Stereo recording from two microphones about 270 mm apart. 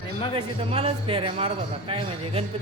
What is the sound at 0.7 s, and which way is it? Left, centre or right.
Speech, right.